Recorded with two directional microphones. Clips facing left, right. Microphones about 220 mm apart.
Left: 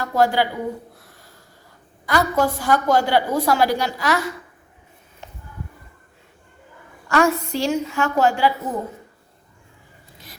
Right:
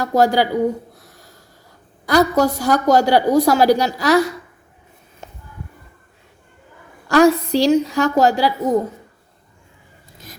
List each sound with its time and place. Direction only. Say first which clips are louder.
0.0 s a woman's voice: right 3 dB; 40° right (ahead or behind)
7.1 s a woman's voice: right 6 dB; 35° right (ahead or behind)